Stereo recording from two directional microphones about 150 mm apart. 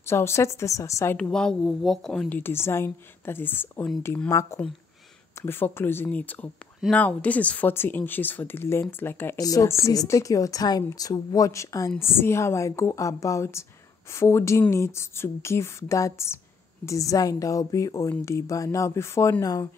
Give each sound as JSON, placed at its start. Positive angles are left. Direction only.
{"t": 0.0, "sound": "a woman's voice", "side_deg": 15}
{"t": 1.1, "sound": "a woman's voice", "side_deg": 5}